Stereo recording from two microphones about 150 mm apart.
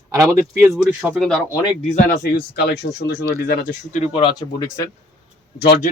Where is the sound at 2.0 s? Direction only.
70° left (ahead or behind).